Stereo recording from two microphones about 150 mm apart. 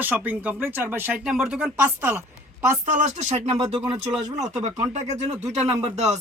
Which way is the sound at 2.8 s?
55° right (ahead or behind).